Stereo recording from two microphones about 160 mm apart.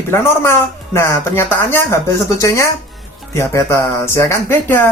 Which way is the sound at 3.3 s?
15° left (ahead or behind).